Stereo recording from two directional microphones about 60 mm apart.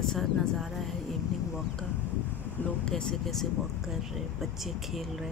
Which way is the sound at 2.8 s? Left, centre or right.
Centre.